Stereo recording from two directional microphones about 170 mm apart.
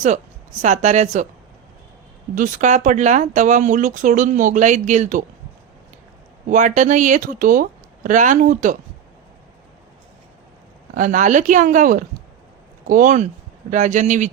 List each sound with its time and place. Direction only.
0.6 s speech: 45° right (ahead or behind)
2.3 s speech: 50° right (ahead or behind)
6.5 s speech: 45° right (ahead or behind)
10.9 s speech: 50° right (ahead or behind)